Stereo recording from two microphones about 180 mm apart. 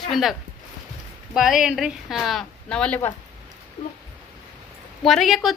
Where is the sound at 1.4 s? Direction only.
Centre (ahead or behind).